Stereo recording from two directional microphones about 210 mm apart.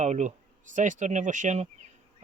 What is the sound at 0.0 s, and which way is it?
Speech, 35° right (ahead or behind).